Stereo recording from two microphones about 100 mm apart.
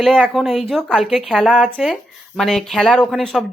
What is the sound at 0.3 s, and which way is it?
Speech, centre (ahead or behind).